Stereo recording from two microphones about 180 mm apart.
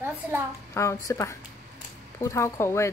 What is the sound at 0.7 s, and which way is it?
Speech, 15° left (ahead or behind).